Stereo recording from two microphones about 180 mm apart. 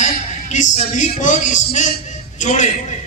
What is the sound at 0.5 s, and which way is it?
A man's voice, 45° left (ahead or behind).